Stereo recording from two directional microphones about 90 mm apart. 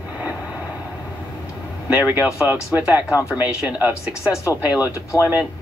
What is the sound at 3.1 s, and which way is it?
Speech, 35° left (ahead or behind).